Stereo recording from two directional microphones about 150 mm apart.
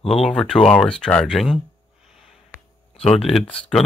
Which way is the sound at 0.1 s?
Centre (ahead or behind).